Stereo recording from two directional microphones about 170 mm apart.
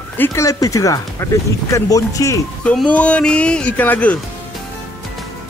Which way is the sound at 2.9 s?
5° left (ahead or behind).